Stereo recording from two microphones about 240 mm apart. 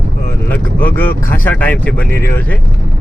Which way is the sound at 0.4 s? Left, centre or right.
Centre.